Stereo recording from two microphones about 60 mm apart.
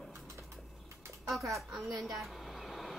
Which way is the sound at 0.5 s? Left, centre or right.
Right.